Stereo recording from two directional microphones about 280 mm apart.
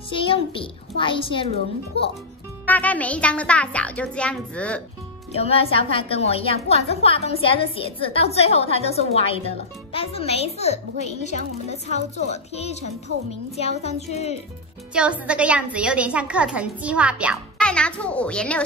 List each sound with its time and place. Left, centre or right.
0.1 s a woman's voice: centre
2.6 s a woman's voice: centre
5.3 s a woman's voice: left
15.0 s a woman's voice: centre